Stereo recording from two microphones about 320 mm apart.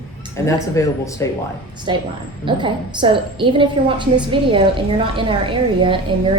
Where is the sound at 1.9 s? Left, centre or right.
Centre.